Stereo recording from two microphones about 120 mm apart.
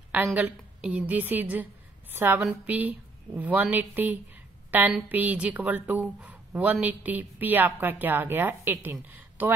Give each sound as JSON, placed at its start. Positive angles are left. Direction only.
{"t": 0.1, "sound": "a woman's voice", "side_deg": -10}